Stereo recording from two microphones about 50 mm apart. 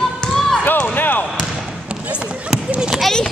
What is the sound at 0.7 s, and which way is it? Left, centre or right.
Speech, left.